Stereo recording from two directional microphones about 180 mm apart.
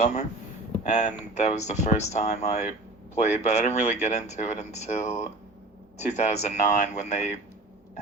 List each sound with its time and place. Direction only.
0.9 s speech: 40° left (ahead or behind)